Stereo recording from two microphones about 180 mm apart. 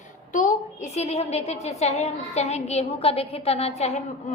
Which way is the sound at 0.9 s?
35° left (ahead or behind).